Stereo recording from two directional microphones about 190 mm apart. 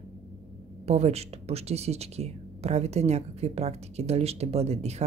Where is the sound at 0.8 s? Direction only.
35° right (ahead or behind).